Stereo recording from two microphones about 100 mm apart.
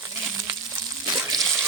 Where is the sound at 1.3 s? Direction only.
5° left (ahead or behind).